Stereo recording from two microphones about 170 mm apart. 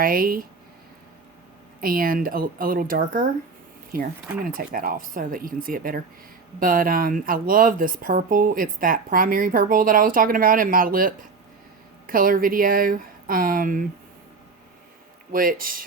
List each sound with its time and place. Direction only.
0.0 s speech: 60° right (ahead or behind)
1.8 s speech: 60° right (ahead or behind)
15.3 s speech: 55° right (ahead or behind)